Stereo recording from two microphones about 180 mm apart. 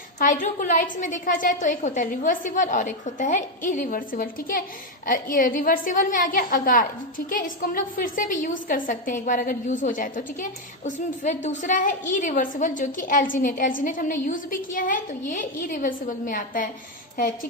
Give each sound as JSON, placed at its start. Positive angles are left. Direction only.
{"t": 0.2, "sound": "a woman's voice", "side_deg": 45}